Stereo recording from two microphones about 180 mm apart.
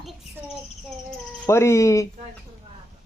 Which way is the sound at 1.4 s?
15° left (ahead or behind).